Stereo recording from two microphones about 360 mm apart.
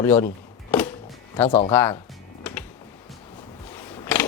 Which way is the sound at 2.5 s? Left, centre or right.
Centre.